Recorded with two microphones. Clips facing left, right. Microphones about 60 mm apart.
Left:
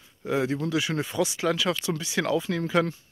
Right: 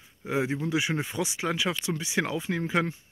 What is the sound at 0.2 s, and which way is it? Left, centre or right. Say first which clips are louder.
Speech: left 2 dB; centre.